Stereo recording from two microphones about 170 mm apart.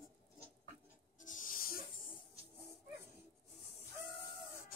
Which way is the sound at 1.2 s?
50° left (ahead or behind).